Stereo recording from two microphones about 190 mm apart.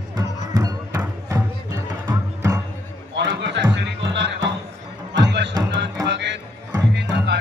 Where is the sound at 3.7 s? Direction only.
65° right (ahead or behind).